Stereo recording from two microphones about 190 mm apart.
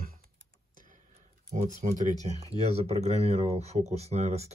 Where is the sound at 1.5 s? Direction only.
35° right (ahead or behind).